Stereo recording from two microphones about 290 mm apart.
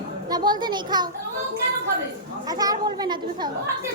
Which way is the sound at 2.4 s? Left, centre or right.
Centre.